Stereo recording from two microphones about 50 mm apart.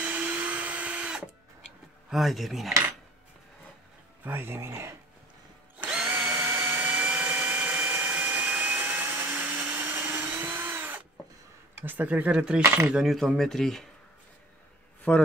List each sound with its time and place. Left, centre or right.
0.0 s drill: right
2.0 s speech: centre
4.2 s speech: right
6.0 s drill: right
6.4 s a sound: right
9.9 s vacuum cleaner: right
10.3 s drill: right
11.8 s speech: right
12.1 s speech: right
13.0 s speech: centre
15.1 s speech: centre